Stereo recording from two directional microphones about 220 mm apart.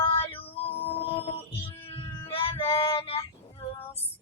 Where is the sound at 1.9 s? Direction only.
25° left (ahead or behind).